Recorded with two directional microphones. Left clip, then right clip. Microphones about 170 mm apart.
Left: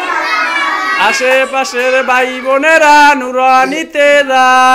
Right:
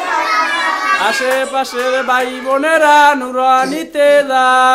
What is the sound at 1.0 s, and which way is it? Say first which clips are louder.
Speech: left 4 dB; 15° right (ahead or behind).